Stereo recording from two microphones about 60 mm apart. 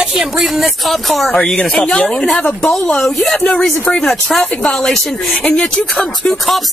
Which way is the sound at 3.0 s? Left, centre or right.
Centre.